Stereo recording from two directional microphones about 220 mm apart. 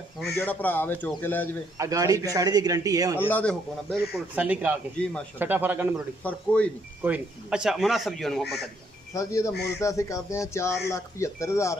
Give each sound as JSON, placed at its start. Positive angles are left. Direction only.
{"t": 0.4, "sound": "speech", "side_deg": 10}
{"t": 1.8, "sound": "a man's voice", "side_deg": -15}
{"t": 3.2, "sound": "speech", "side_deg": 10}
{"t": 4.4, "sound": "a man's voice", "side_deg": -5}
{"t": 5.0, "sound": "speech", "side_deg": 5}
{"t": 5.4, "sound": "a man's voice", "side_deg": -10}
{"t": 6.2, "sound": "speech", "side_deg": 5}
{"t": 7.0, "sound": "speech", "side_deg": -5}
{"t": 9.1, "sound": "speech", "side_deg": 15}